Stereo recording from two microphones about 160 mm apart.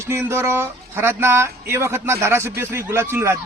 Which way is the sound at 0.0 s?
15° right (ahead or behind).